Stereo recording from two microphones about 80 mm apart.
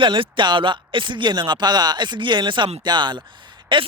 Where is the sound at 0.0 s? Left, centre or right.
Right.